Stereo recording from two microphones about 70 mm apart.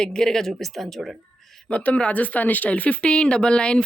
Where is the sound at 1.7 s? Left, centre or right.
Centre.